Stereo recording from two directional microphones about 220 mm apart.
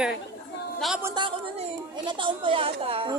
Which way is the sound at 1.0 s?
20° right (ahead or behind).